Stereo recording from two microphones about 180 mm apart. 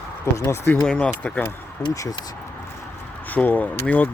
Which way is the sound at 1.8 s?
20° left (ahead or behind).